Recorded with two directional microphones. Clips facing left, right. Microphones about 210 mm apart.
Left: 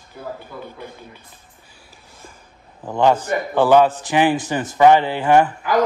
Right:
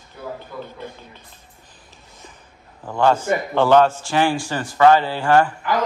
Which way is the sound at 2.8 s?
15° left (ahead or behind).